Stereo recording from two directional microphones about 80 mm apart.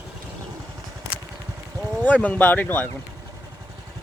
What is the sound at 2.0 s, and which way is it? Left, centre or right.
Speech, centre.